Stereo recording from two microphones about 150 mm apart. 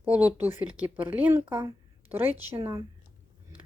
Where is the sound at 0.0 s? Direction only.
10° right (ahead or behind).